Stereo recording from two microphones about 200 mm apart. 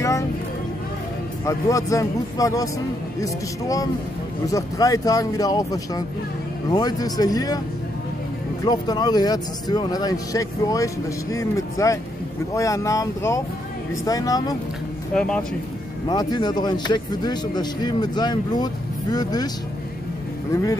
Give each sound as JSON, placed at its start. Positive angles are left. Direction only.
{"t": 1.4, "sound": "a man's voice", "side_deg": 15}
{"t": 8.6, "sound": "a man's voice", "side_deg": 20}
{"t": 15.1, "sound": "speech", "side_deg": 5}
{"t": 16.1, "sound": "a man's voice", "side_deg": 20}